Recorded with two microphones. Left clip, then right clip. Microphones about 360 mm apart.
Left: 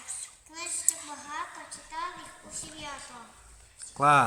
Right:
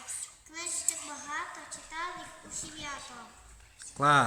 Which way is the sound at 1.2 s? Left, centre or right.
Centre.